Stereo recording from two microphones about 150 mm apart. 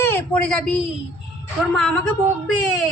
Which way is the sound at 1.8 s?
5° left (ahead or behind).